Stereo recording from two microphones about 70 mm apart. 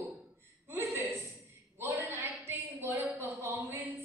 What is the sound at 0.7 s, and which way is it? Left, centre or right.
Chuckle, right.